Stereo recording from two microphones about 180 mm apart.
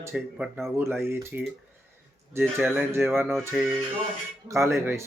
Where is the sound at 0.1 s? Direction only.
5° right (ahead or behind).